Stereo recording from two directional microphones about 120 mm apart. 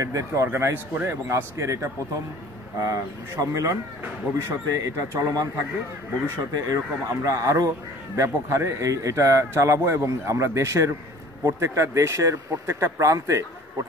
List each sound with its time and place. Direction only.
0.0 s speech: 25° right (ahead or behind)